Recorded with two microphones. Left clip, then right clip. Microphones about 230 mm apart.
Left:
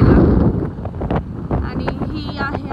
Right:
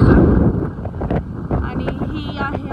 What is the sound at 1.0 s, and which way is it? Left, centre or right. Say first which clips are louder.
Wind noise: left 1 dB; centre.